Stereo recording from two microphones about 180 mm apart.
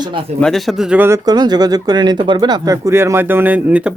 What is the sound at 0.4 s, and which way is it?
Speech, centre (ahead or behind).